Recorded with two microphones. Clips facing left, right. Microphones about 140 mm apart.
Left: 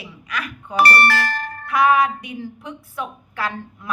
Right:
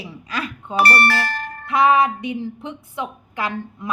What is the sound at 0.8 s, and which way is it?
Speech, 90° left.